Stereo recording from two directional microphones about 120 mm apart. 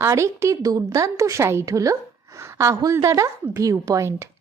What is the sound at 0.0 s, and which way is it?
A woman's voice, 25° right (ahead or behind).